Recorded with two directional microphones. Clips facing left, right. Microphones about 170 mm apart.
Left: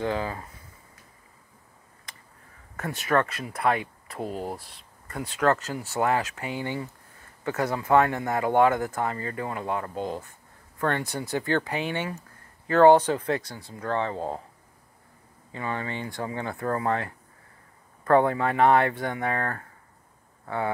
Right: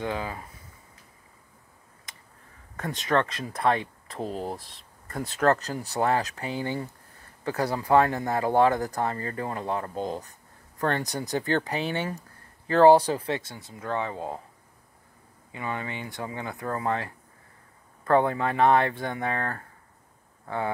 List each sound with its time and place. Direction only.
0.0 s speech: 15° right (ahead or behind)
2.8 s speech: 20° right (ahead or behind)
4.2 s speech: 5° left (ahead or behind)
5.3 s speech: 40° right (ahead or behind)
9.9 s speech: 5° left (ahead or behind)
10.8 s speech: 35° right (ahead or behind); by 14.1 s 15° right (ahead or behind)
14.1 s speech: 25° left (ahead or behind)
15.5 s speech: 15° right (ahead or behind)